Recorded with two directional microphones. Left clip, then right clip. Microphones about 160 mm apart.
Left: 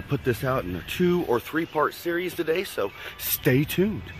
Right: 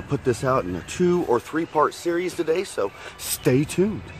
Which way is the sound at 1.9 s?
10° right (ahead or behind).